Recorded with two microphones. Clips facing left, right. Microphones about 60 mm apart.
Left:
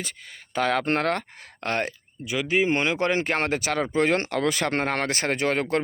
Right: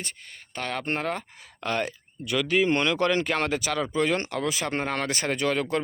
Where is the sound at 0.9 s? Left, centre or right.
Left.